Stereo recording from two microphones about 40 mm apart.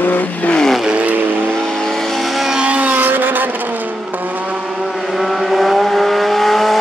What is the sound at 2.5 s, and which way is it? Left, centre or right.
Vehicle, right.